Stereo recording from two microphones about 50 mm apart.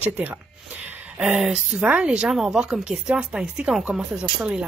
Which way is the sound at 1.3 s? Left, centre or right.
Centre.